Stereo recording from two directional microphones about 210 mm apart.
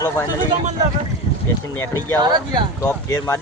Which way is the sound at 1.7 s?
10° left (ahead or behind).